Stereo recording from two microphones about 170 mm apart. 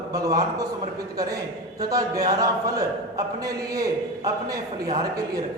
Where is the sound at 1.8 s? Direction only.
20° right (ahead or behind).